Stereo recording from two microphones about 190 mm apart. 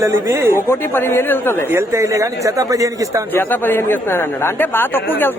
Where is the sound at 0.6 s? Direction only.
10° left (ahead or behind).